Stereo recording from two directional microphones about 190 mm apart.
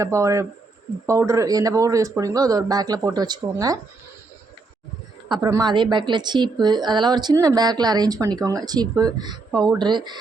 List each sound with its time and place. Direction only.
0.0 s a woman's voice: 15° right (ahead or behind)
5.3 s a woman's voice: 20° right (ahead or behind)